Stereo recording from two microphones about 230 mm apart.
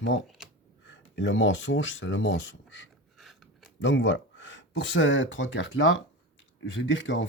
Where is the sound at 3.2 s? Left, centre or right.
Centre.